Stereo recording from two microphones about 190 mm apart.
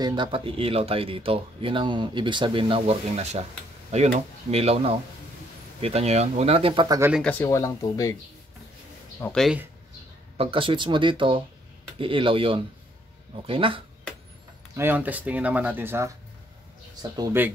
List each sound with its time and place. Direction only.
0.0 s speech: 25° right (ahead or behind)
7.0 s speech: 5° right (ahead or behind)
7.2 s speech: 10° left (ahead or behind)
9.2 s speech: centre (ahead or behind)
10.3 s speech: 30° right (ahead or behind)
14.8 s speech: 10° right (ahead or behind)